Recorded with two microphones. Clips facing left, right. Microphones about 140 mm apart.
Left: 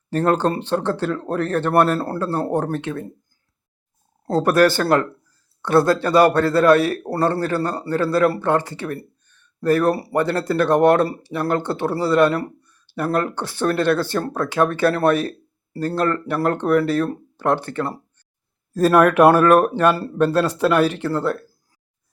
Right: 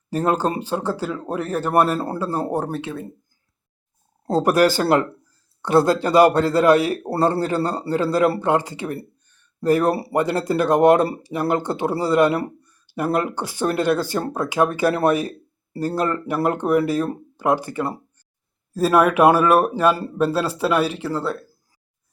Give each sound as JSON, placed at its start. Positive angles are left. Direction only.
{"t": 0.1, "sound": "speech", "side_deg": -5}
{"t": 4.3, "sound": "speech", "side_deg": -15}
{"t": 9.3, "sound": "a sound", "side_deg": -15}
{"t": 10.2, "sound": "speech", "side_deg": -15}